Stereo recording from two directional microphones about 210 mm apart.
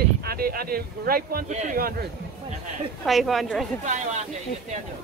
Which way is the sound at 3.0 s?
Centre (ahead or behind).